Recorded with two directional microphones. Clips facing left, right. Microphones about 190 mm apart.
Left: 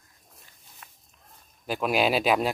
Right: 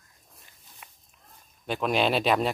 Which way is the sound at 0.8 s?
10° right (ahead or behind).